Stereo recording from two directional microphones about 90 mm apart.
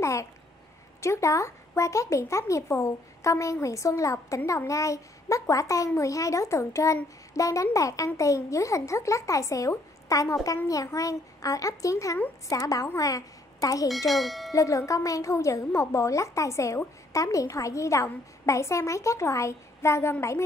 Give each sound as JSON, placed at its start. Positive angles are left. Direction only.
{"t": 0.0, "sound": "a child's voice", "side_deg": 35}
{"t": 13.8, "sound": "speech", "side_deg": 0}
{"t": 14.5, "sound": "a woman's voice", "side_deg": 35}